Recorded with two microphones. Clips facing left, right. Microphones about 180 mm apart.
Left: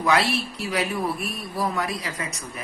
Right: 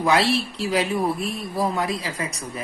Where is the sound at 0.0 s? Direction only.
30° right (ahead or behind).